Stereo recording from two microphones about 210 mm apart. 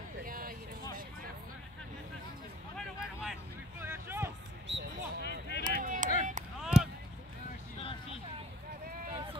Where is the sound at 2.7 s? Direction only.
Centre (ahead or behind).